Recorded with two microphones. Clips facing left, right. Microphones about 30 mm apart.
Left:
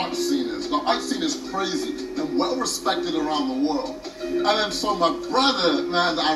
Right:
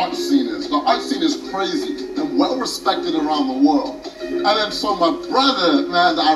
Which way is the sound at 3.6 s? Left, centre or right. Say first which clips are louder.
Right 8 dB; right.